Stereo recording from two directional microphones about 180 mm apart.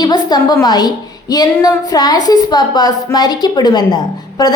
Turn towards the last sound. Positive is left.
turn(degrees=20)  # may be behind; listen again after turning